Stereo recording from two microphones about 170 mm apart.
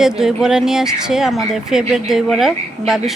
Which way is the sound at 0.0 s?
5° right (ahead or behind).